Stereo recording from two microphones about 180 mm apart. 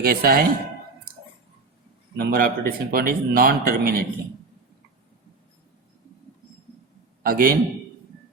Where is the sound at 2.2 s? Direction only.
55° right (ahead or behind).